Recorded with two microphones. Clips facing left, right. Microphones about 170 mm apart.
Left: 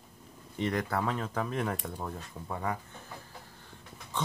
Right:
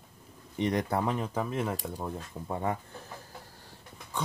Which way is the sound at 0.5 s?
20° right (ahead or behind).